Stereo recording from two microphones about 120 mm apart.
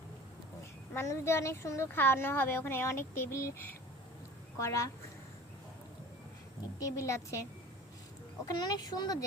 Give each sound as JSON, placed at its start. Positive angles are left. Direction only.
{"t": 0.9, "sound": "speech", "side_deg": 25}
{"t": 6.7, "sound": "speech", "side_deg": 30}
{"t": 8.4, "sound": "speech", "side_deg": 35}